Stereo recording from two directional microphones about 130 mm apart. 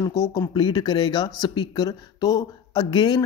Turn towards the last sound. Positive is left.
turn(degrees=35)  # may be behind; listen again after turning